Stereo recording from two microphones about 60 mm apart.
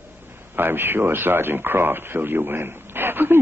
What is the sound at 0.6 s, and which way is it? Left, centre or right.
Speech, right.